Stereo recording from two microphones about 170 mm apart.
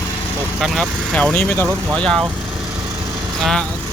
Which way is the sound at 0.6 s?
5° left (ahead or behind).